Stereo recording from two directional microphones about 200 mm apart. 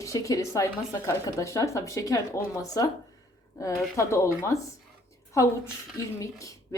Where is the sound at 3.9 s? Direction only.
15° left (ahead or behind).